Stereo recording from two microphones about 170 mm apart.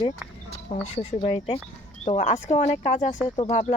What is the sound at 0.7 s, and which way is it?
Speech, 35° left (ahead or behind).